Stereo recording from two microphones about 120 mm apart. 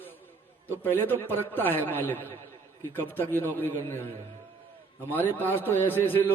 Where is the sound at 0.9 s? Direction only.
15° left (ahead or behind).